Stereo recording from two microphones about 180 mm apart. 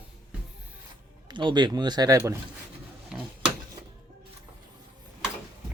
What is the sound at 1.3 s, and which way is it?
Speech, 25° right (ahead or behind).